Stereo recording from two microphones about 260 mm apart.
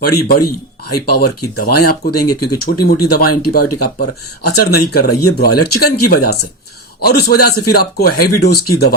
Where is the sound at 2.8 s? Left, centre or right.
Left.